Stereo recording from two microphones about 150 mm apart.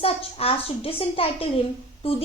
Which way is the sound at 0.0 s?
40° left (ahead or behind).